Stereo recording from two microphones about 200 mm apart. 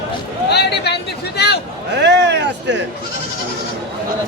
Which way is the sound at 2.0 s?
60° right (ahead or behind).